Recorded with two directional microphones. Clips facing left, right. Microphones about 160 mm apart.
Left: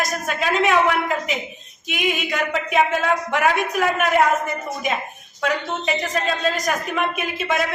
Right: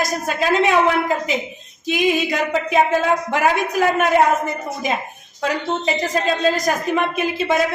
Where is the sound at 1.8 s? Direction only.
30° right (ahead or behind).